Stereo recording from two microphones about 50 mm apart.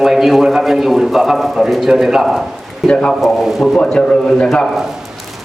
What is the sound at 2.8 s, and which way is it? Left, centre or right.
Speech, centre.